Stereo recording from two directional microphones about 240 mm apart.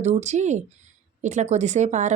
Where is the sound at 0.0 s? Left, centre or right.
Right.